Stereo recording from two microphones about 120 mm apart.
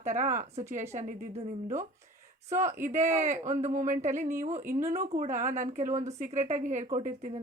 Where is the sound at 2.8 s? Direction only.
90° right.